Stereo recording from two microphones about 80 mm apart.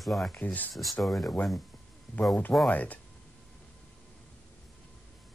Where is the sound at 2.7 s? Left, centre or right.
Centre.